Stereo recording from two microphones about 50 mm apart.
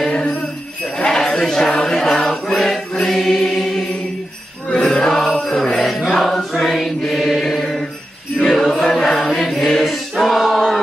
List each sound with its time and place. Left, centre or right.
0.0 s jingle bell: centre
0.9 s mantra: centre
3.1 s choir: centre
4.6 s jingle bell: centre
6.0 s mantra: centre
7.2 s chant: centre